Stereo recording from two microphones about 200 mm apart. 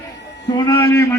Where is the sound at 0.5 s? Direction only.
15° left (ahead or behind).